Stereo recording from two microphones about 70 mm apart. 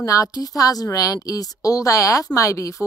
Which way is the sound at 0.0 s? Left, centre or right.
Left.